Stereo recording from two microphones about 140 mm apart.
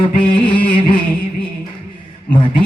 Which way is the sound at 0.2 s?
35° left (ahead or behind).